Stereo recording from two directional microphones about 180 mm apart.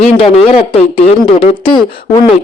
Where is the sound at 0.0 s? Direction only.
35° left (ahead or behind).